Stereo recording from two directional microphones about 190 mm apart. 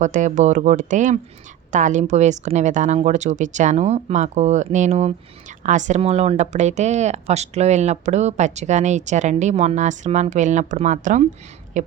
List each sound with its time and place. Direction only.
0.0 s speech: 40° right (ahead or behind)